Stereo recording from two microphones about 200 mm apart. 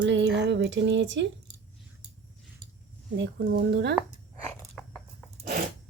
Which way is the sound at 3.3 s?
55° right (ahead or behind).